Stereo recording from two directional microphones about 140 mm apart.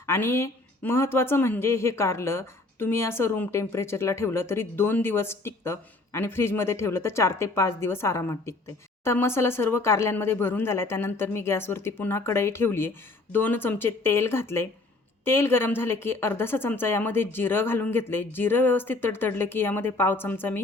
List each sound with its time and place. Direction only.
0.0 s speech: 20° left (ahead or behind)